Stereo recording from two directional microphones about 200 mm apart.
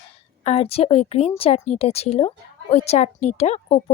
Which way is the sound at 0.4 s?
30° left (ahead or behind).